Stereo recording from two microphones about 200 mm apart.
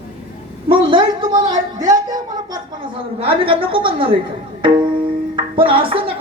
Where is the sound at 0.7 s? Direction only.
25° right (ahead or behind).